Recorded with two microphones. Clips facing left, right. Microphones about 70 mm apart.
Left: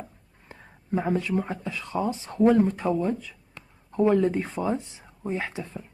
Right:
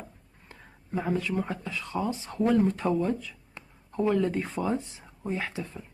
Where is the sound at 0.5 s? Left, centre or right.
Left.